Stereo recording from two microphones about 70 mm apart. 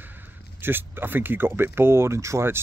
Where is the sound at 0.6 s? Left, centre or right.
Right.